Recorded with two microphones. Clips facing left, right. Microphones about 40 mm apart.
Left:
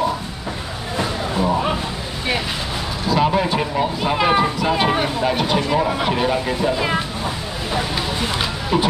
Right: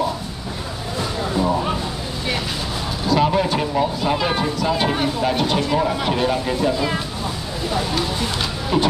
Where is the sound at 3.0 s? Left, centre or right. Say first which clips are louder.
Even; centre.